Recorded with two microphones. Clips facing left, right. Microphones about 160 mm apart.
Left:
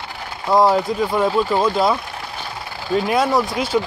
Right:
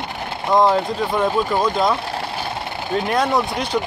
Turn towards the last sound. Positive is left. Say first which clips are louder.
# left 1 dB
turn(degrees=5)  # may be behind; listen again after turning